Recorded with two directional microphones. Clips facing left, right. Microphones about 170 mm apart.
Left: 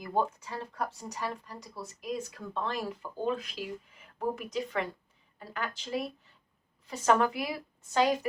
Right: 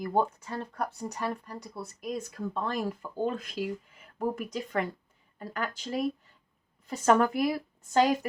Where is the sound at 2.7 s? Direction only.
45° right (ahead or behind).